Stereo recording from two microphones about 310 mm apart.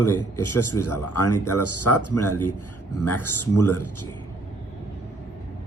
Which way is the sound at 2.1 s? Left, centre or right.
Centre.